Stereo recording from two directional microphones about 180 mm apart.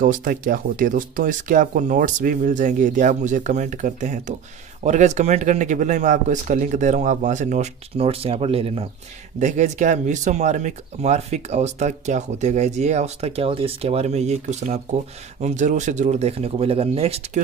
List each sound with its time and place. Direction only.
0.0 s speech: 50° right (ahead or behind); by 17.4 s 35° right (ahead or behind)